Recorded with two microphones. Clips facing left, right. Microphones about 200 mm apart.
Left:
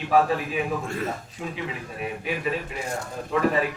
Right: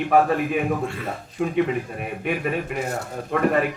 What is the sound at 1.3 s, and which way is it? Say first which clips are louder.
Speech: right 11 dB; 55° right (ahead or behind).